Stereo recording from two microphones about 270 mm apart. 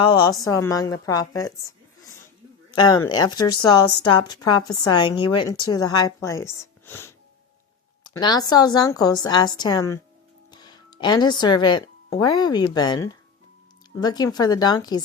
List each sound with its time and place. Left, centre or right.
0.0 s speech: centre
2.7 s speech: centre